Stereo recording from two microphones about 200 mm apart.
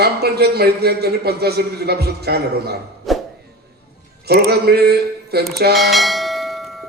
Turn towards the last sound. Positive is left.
turn(degrees=0)  # may be behind; listen again after turning